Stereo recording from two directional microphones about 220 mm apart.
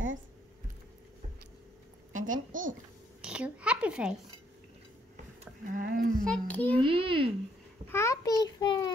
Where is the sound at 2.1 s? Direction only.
35° right (ahead or behind).